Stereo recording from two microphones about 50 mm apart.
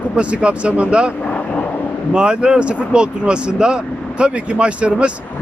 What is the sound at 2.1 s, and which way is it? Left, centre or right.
Speech, centre.